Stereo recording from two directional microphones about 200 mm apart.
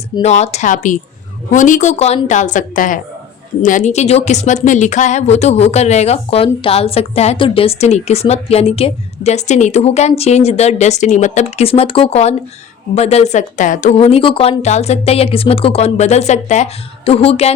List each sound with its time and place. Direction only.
0.2 s speech: 35° left (ahead or behind)